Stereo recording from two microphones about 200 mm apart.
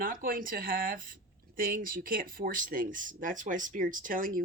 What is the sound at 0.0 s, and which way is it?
Speech, 45° right (ahead or behind).